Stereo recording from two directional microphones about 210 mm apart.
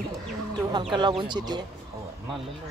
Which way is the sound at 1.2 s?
20° right (ahead or behind).